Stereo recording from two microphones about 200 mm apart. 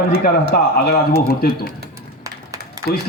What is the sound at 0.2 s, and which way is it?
A man's voice, 50° left (ahead or behind).